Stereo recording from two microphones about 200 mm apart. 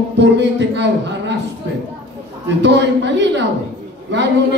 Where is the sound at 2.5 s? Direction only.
60° right (ahead or behind).